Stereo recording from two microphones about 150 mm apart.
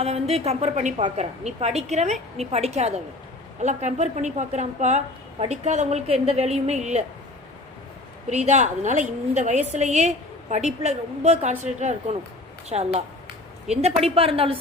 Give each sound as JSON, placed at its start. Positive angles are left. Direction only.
{"t": 0.0, "sound": "a woman's voice", "side_deg": -45}
{"t": 8.3, "sound": "a woman's voice", "side_deg": -50}